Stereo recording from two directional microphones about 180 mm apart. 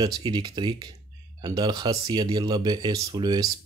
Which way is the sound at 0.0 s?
25° right (ahead or behind).